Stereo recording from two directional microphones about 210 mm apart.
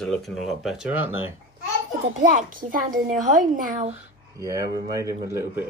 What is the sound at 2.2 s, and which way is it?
A woman's voice, 40° right (ahead or behind).